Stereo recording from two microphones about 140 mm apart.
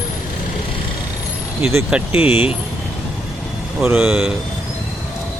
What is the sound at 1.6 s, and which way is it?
Speech, 20° right (ahead or behind).